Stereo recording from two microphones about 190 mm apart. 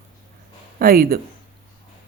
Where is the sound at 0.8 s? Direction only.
50° right (ahead or behind).